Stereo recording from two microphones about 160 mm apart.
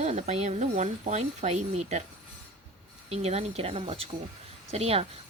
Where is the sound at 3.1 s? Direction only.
40° right (ahead or behind).